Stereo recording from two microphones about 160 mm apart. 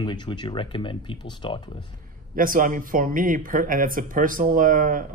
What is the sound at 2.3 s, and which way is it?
Speech, 60° right (ahead or behind).